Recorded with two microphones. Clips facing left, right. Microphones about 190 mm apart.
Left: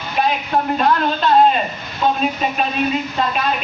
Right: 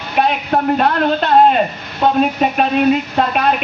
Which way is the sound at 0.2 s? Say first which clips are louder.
Right 3 dB; 60° right (ahead or behind).